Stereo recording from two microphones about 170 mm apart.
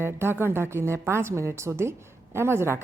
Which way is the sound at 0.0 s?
15° right (ahead or behind).